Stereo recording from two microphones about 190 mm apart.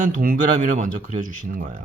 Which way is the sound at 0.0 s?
45° right (ahead or behind).